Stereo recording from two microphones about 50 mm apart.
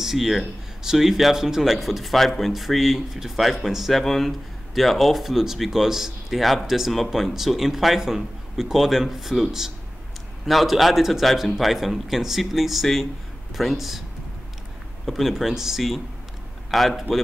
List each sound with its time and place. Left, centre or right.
0.0 s speech: centre
15.0 s speech: centre